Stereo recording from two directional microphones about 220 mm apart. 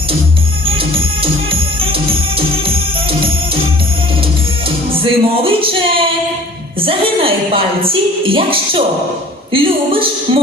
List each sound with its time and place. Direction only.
1.2 s music: 25° right (ahead or behind)
5.0 s a woman's voice: 25° right (ahead or behind)